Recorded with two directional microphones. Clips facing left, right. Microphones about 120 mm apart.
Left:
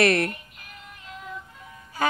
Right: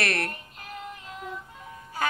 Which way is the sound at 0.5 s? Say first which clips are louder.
Right 7 dB; 35° right (ahead or behind).